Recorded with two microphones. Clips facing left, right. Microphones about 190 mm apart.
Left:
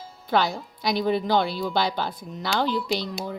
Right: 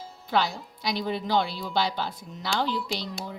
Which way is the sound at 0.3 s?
50° left (ahead or behind).